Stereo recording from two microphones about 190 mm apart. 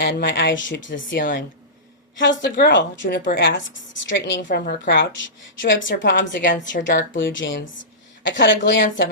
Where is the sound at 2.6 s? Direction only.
65° left (ahead or behind).